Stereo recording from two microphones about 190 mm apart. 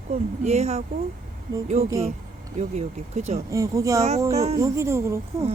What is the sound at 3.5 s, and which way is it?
Speech, 15° right (ahead or behind).